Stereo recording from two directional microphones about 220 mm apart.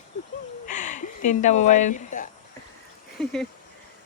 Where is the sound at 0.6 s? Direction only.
35° left (ahead or behind).